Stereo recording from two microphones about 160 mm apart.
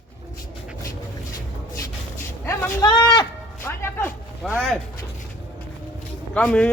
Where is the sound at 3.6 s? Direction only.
15° left (ahead or behind).